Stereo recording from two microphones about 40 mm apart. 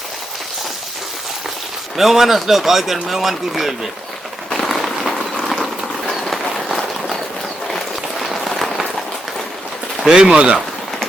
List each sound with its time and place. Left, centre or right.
2.0 s speech: centre
4.4 s a sound: centre
6.1 s run: centre
8.2 s applause: centre
10.1 s speech: centre